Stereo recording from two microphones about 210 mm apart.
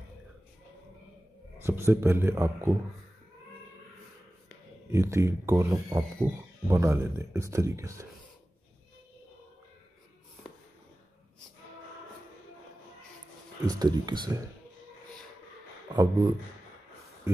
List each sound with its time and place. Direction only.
1.6 s speech: 10° right (ahead or behind)
4.9 s speech: 15° right (ahead or behind)
13.7 s speech: 20° right (ahead or behind)
15.9 s speech: 15° right (ahead or behind)